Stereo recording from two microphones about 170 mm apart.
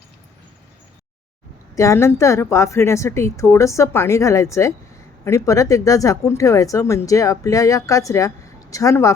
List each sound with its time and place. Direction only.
1.7 s a woman's voice: 15° left (ahead or behind)